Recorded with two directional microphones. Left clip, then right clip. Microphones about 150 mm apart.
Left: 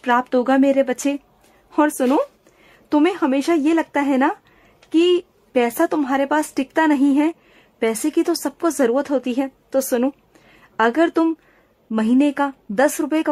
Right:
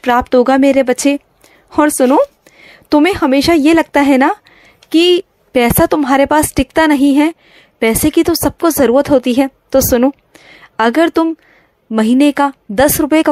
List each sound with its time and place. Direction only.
0.0 s a woman's voice: 35° right (ahead or behind)